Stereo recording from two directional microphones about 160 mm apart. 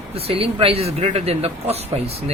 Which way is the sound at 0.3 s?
35° right (ahead or behind).